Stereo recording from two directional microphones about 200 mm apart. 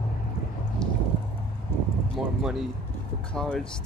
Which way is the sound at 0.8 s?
5° left (ahead or behind).